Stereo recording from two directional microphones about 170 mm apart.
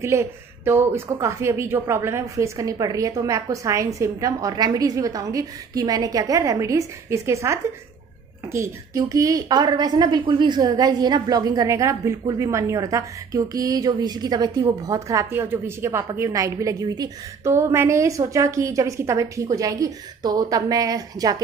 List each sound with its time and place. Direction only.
0.0 s a woman's voice: 15° right (ahead or behind)